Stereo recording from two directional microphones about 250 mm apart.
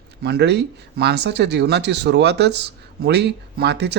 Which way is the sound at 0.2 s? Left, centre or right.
Right.